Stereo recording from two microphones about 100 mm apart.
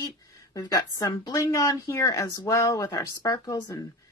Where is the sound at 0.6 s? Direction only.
35° left (ahead or behind).